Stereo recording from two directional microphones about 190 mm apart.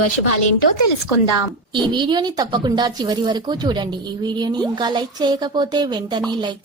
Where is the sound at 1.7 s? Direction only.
25° right (ahead or behind).